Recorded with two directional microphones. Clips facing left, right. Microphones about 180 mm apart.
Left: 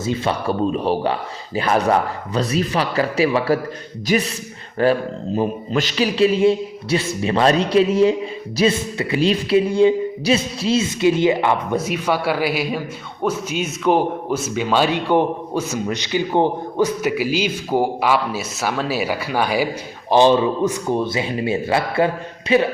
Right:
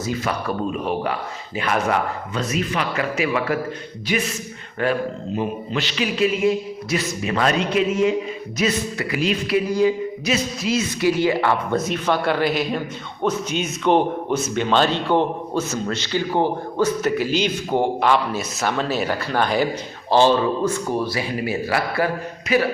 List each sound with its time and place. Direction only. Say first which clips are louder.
0.0 s speech: left 3 dB; 25° left (ahead or behind)